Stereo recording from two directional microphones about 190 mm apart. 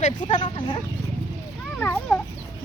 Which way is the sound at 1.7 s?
10° left (ahead or behind).